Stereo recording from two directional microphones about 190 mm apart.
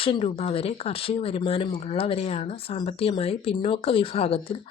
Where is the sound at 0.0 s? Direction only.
30° left (ahead or behind).